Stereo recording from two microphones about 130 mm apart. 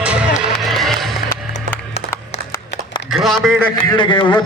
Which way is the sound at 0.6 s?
Centre (ahead or behind).